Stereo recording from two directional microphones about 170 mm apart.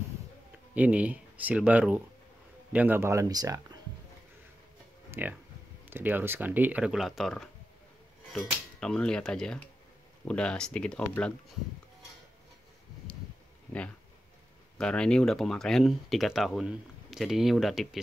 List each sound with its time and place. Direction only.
0.7 s speech: 10° right (ahead or behind)
5.2 s speech: 10° right (ahead or behind)
8.3 s cutlery: 5° left (ahead or behind)
10.2 s speech: 5° left (ahead or behind)
14.8 s speech: 5° left (ahead or behind)